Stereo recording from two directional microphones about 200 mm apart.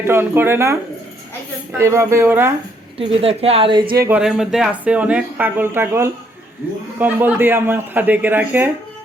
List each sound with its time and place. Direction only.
0.1 s a man's voice: 10° right (ahead or behind)
1.8 s a man's voice: 15° right (ahead or behind)
3.0 s a woman's voice: 30° right (ahead or behind)
4.2 s a man's voice: 5° right (ahead or behind)